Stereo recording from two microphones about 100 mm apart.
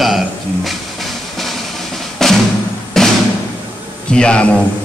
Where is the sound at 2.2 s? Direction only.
5° left (ahead or behind).